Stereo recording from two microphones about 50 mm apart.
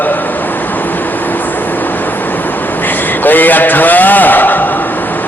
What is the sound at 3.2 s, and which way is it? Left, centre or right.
A man's voice, left.